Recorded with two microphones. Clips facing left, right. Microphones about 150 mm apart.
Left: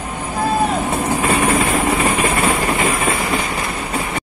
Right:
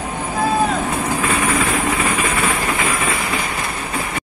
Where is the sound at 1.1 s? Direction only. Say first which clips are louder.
Left 4 dB; 35° left (ahead or behind).